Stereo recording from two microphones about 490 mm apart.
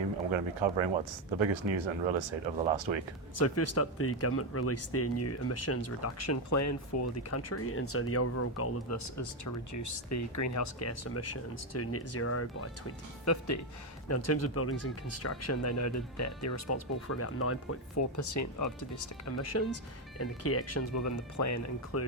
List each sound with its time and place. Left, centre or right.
0.3 s speech: right
3.3 s speech: left